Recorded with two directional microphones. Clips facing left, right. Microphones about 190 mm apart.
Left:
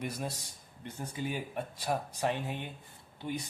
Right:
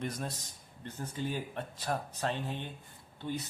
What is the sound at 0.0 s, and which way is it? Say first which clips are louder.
Speech: even; 10° left (ahead or behind).